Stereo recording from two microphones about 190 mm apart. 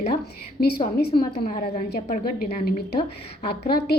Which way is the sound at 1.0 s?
30° left (ahead or behind).